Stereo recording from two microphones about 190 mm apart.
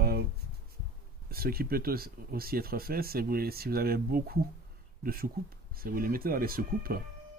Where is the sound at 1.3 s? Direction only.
55° right (ahead or behind).